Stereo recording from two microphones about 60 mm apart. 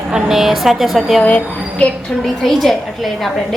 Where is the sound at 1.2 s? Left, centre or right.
Left.